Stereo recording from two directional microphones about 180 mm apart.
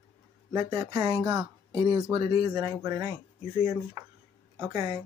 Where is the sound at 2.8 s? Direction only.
15° right (ahead or behind).